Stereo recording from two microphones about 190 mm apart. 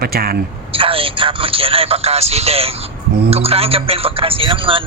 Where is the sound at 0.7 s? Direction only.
30° right (ahead or behind).